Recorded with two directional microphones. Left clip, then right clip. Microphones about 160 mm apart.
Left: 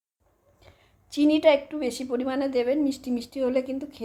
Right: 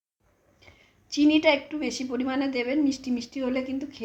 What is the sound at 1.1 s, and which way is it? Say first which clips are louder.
A woman's voice: left 1 dB; 45° left (ahead or behind).